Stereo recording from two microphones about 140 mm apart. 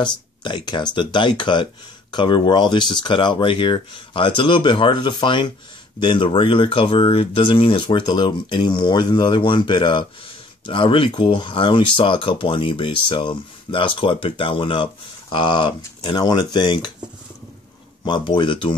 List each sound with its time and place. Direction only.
0.0 s speech: 35° left (ahead or behind)
18.0 s speech: 35° left (ahead or behind)